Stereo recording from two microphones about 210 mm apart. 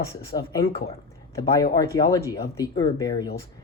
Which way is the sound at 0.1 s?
15° left (ahead or behind).